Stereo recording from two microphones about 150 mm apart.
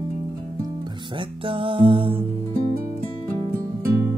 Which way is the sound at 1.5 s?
35° right (ahead or behind).